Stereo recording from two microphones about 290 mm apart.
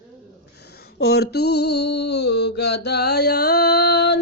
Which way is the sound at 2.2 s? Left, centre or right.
Left.